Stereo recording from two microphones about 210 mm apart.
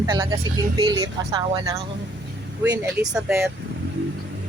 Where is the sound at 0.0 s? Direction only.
20° right (ahead or behind).